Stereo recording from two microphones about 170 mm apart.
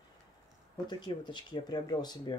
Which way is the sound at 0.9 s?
25° left (ahead or behind).